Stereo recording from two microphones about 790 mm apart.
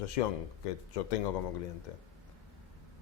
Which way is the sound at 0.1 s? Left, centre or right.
Left.